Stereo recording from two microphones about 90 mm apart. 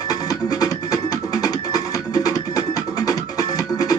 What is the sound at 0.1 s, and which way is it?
Music, 45° left (ahead or behind).